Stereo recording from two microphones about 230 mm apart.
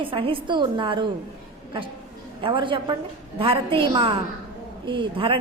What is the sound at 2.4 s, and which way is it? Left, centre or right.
A woman's voice, right.